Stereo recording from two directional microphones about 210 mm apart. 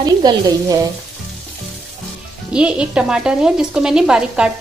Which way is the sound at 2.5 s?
5° right (ahead or behind).